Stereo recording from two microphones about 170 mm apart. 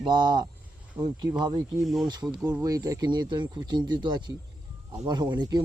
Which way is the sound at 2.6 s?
20° right (ahead or behind).